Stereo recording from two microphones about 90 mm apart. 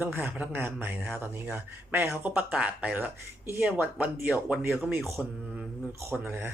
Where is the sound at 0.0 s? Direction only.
20° right (ahead or behind).